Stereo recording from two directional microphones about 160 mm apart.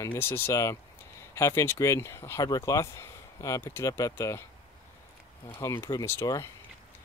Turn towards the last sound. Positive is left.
turn(degrees=20)  # may be behind; listen again after turning